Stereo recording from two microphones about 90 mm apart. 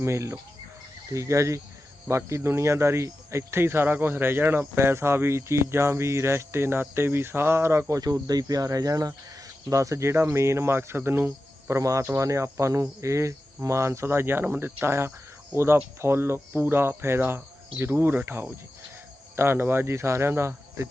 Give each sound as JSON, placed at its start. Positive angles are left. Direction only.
{"t": 0.0, "sound": "speech", "side_deg": -30}
{"t": 11.7, "sound": "speech", "side_deg": -35}